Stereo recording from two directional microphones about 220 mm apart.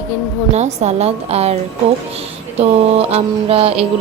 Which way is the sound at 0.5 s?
30° right (ahead or behind).